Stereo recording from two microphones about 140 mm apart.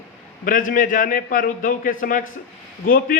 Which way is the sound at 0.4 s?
80° left.